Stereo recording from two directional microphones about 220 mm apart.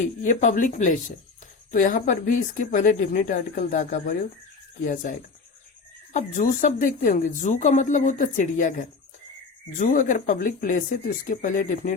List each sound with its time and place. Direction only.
0.2 s speech: 35° left (ahead or behind)
6.1 s speech: 35° left (ahead or behind)